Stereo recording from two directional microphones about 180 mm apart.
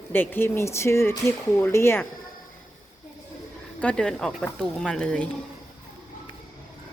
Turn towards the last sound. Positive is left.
turn(degrees=5)  # may be behind; listen again after turning